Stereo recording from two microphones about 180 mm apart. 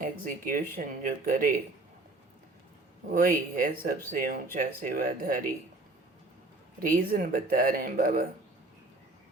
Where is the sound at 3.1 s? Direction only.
50° right (ahead or behind).